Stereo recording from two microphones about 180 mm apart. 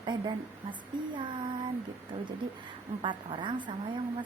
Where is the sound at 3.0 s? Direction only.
25° right (ahead or behind).